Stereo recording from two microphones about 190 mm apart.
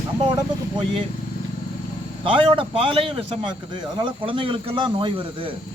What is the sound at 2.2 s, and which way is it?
A man's voice, 30° right (ahead or behind).